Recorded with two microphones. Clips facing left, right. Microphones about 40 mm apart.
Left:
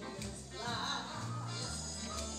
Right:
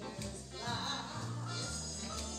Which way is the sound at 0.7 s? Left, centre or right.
Left.